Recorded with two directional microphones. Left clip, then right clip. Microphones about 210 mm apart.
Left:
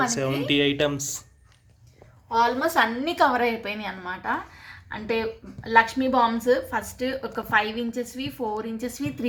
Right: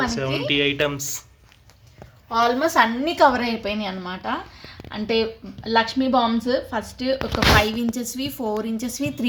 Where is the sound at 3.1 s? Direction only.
50° right (ahead or behind).